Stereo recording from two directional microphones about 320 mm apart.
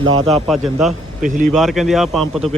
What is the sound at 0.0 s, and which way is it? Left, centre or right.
Speech, right.